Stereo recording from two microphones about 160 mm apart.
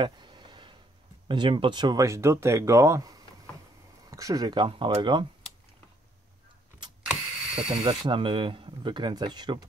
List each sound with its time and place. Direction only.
0.0 s a sound: 30° right (ahead or behind)
1.3 s speech: 30° right (ahead or behind)
7.1 s mechanisms: 5° right (ahead or behind)
8.1 s speech: 30° right (ahead or behind)